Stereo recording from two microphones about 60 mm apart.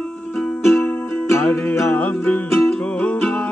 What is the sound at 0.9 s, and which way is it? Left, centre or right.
Music, left.